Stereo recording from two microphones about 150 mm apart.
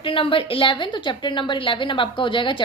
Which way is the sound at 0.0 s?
35° left (ahead or behind).